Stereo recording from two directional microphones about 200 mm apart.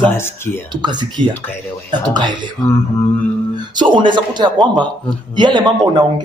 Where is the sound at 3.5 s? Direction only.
20° right (ahead or behind).